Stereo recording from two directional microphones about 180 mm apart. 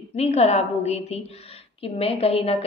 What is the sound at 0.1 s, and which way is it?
Speech, 35° left (ahead or behind).